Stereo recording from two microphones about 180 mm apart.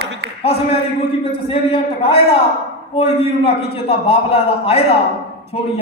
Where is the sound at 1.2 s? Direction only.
30° left (ahead or behind).